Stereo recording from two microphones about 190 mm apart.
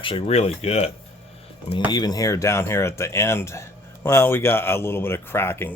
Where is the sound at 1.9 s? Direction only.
20° left (ahead or behind).